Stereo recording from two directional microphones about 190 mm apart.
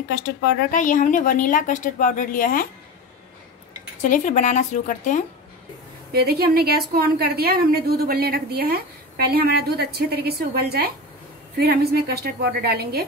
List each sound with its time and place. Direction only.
0.1 s speech: 55° left (ahead or behind)
0.7 s speech: 40° left (ahead or behind)
4.0 s a woman's voice: 40° left (ahead or behind)
6.1 s a woman's voice: 55° right (ahead or behind)